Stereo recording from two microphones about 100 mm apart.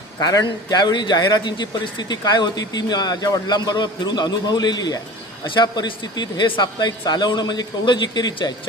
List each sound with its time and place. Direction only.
0.2 s a man's voice: 40° left (ahead or behind)